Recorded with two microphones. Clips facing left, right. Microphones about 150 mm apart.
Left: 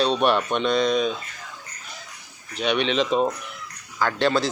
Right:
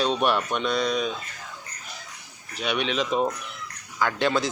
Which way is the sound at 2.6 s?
5° right (ahead or behind).